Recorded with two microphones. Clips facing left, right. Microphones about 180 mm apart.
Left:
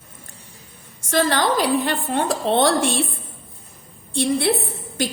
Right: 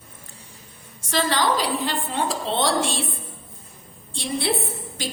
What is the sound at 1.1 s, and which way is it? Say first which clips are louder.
A woman's voice: left 3 dB; 55° left (ahead or behind).